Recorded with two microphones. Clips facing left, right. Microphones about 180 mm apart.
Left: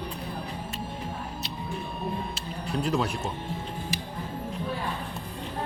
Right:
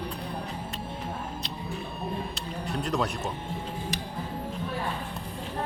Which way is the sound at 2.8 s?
Centre (ahead or behind).